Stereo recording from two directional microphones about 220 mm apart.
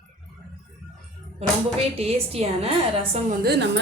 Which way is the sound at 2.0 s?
25° right (ahead or behind).